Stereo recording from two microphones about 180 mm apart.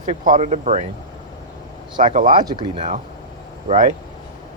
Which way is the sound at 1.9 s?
45° right (ahead or behind).